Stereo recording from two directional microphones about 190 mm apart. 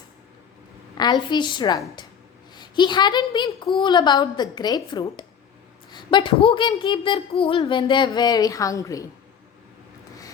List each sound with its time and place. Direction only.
0.9 s a woman's voice: 20° left (ahead or behind)